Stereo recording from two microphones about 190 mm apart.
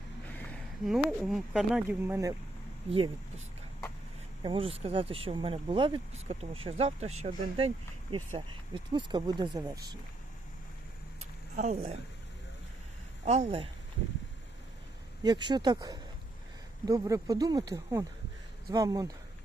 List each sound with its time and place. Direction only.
0.3 s a sound: 10° left (ahead or behind)
0.9 s speech: centre (ahead or behind)
2.9 s speech: 30° right (ahead or behind)
4.4 s speech: 30° right (ahead or behind)
11.2 s a sound: 40° right (ahead or behind)
13.2 s speech: 35° right (ahead or behind)
15.2 s speech: 20° right (ahead or behind)